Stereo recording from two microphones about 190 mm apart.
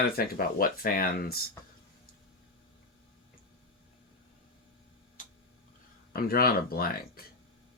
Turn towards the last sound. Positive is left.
turn(degrees=50)  # may be behind; listen again after turning